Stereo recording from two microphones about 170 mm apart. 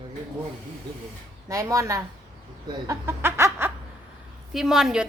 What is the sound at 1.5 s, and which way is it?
Speech, 20° right (ahead or behind).